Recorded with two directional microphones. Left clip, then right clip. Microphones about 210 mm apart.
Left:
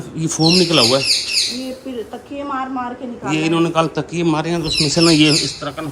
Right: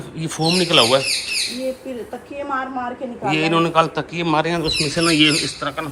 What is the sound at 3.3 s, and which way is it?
A man's voice, 15° left (ahead or behind).